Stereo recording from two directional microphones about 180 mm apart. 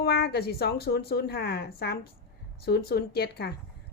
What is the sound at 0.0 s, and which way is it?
A woman's voice, 60° left (ahead or behind).